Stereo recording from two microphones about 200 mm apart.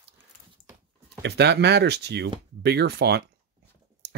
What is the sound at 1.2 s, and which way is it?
Speech, 55° right (ahead or behind).